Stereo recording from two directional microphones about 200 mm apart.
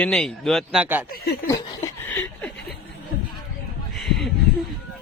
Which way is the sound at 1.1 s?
55° left (ahead or behind).